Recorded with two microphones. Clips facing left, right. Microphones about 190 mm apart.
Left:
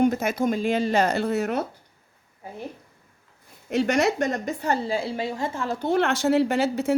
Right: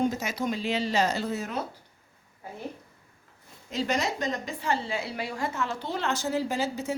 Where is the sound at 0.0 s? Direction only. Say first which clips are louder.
Left 6 dB; 55° left (ahead or behind).